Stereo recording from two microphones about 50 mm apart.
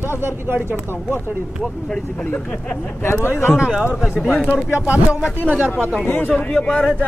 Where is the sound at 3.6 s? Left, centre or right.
Centre.